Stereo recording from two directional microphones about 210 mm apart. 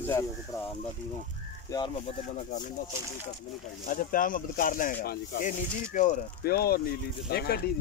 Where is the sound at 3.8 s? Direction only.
40° left (ahead or behind).